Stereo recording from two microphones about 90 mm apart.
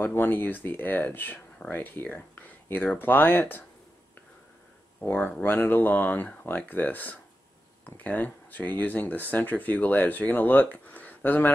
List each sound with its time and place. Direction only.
0.0 s speech: 20° left (ahead or behind)
5.0 s speech: 20° left (ahead or behind)